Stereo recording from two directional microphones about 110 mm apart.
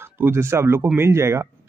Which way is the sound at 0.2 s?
20° right (ahead or behind).